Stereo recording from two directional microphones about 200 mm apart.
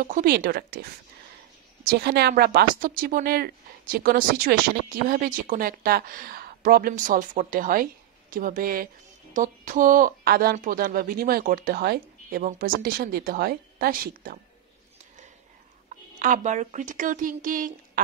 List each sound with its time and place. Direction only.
0.0 s a woman's voice: 45° right (ahead or behind)
1.9 s a woman's voice: 55° right (ahead or behind)
16.2 s a woman's voice: 40° right (ahead or behind)